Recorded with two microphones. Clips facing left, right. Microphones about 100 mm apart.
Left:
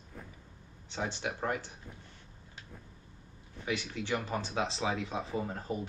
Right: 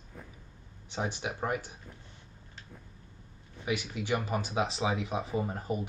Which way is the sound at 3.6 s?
10° right (ahead or behind).